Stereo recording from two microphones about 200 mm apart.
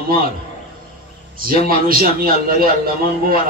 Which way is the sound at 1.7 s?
45° right (ahead or behind).